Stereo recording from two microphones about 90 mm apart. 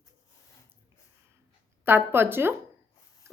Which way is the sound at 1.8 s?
25° right (ahead or behind).